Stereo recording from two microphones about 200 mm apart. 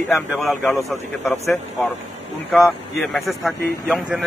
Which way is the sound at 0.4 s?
Centre (ahead or behind).